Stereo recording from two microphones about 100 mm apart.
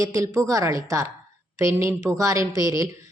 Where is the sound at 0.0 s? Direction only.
35° right (ahead or behind).